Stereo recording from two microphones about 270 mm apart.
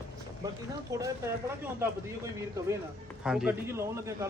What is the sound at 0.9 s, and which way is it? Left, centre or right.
Speech, centre.